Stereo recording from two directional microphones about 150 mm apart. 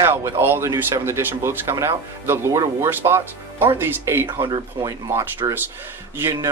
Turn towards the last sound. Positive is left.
turn(degrees=-20)  # may be behind; listen again after turning